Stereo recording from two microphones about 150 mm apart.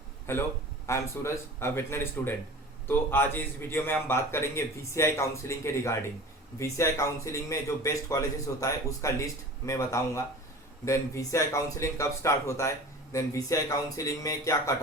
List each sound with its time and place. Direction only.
0.3 s a man's voice: 15° left (ahead or behind)